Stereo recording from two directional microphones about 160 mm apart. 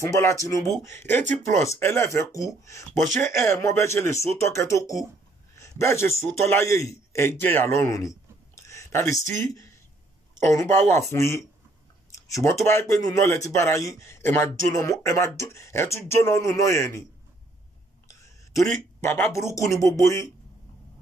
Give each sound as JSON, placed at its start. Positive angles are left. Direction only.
{"t": 0.0, "sound": "a man's voice", "side_deg": 20}
{"t": 12.2, "sound": "a sound", "side_deg": 20}
{"t": 12.6, "sound": "speech", "side_deg": 15}
{"t": 18.0, "sound": "speech", "side_deg": 20}